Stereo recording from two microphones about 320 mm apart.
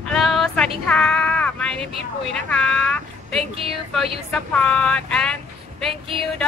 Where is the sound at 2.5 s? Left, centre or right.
Centre.